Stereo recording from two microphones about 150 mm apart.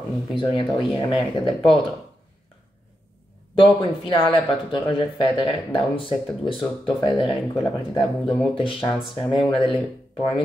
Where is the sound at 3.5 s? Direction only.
35° left (ahead or behind).